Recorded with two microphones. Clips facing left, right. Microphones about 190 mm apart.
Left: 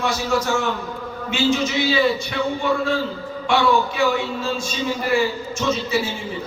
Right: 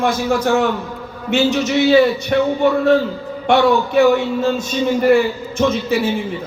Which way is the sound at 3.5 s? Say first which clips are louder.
Right 5 dB; 50° right (ahead or behind).